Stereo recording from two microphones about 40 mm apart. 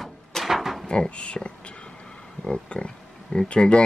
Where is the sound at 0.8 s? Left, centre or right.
Left.